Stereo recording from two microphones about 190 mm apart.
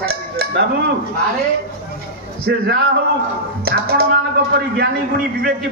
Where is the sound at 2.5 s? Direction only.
55° right (ahead or behind).